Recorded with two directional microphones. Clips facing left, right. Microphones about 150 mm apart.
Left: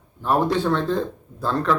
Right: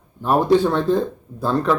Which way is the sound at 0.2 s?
15° right (ahead or behind).